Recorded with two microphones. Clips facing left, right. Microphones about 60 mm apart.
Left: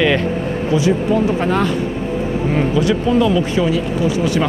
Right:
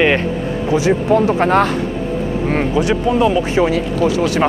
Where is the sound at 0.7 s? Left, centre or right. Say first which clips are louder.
Right 2 dB; right.